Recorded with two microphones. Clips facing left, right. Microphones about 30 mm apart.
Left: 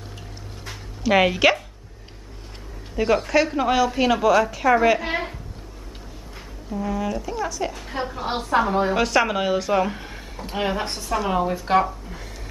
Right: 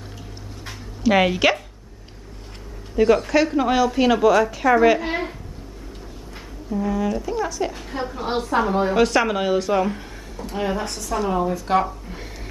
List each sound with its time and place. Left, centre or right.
0.7 s dog: centre
3.0 s a woman's voice: centre
6.7 s a woman's voice: centre
7.8 s a woman's voice: centre
10.4 s a woman's voice: left